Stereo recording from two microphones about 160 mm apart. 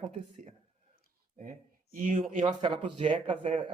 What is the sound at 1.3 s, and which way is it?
Speech, 55° right (ahead or behind).